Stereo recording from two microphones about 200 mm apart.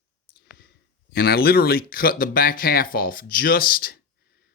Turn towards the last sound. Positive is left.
turn(degrees=50)  # may be behind; listen again after turning